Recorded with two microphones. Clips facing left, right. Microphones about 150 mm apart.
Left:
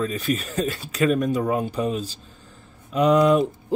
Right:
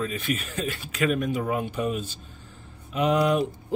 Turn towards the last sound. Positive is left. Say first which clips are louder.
# left 5 dB
turn(degrees=40)  # may be behind; listen again after turning